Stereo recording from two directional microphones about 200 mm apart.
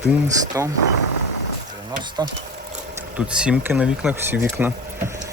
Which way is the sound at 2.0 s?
20° right (ahead or behind).